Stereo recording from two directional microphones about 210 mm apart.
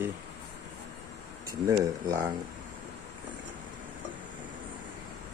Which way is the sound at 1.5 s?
15° right (ahead or behind).